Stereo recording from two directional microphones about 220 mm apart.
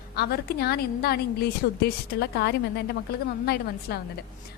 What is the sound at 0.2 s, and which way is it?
A woman's voice, 45° left (ahead or behind).